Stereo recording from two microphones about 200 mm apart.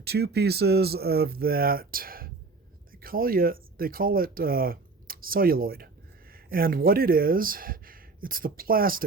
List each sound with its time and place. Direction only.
0.0 s speech: 55° right (ahead or behind)